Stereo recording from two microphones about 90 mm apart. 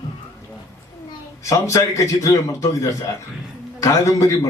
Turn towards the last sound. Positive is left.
turn(degrees=40)  # may be behind; listen again after turning